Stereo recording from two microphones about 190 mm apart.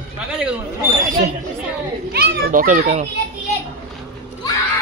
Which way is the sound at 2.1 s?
50° right (ahead or behind).